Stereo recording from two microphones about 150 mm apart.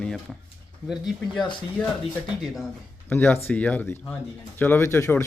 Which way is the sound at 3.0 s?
15° left (ahead or behind).